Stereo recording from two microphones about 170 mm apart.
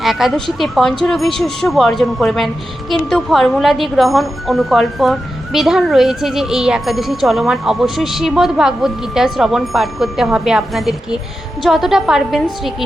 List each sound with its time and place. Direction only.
0.0 s speech: centre (ahead or behind)